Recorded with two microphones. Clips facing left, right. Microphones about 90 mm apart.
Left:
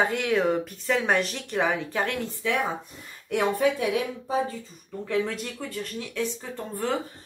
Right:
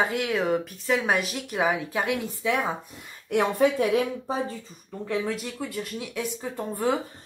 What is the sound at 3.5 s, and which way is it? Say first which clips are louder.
Speech: right 2 dB; 35° right (ahead or behind).